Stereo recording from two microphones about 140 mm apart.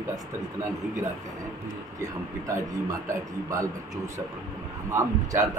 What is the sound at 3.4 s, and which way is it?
A man's voice, 25° right (ahead or behind).